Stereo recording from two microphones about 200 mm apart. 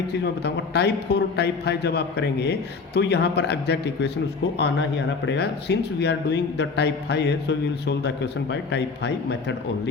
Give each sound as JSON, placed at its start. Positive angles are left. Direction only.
{"t": 0.4, "sound": "speech", "side_deg": 55}